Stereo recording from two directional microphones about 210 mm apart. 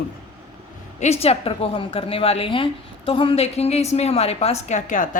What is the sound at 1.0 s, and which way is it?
A woman's voice, 30° left (ahead or behind).